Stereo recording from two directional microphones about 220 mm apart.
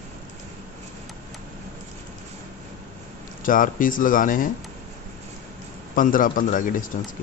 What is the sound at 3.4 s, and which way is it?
Speech, 40° left (ahead or behind).